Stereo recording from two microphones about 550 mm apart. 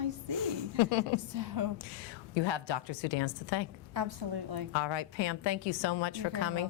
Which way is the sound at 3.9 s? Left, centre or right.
Right.